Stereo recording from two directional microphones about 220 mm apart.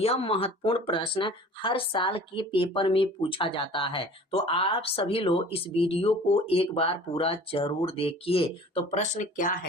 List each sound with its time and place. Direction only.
0.0 s speech: 25° left (ahead or behind)